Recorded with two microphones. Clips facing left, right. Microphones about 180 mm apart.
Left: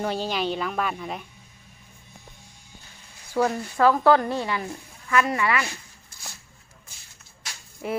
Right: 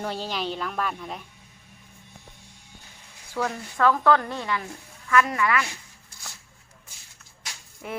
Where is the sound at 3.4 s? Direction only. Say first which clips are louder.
Left 4 dB; 20° left (ahead or behind).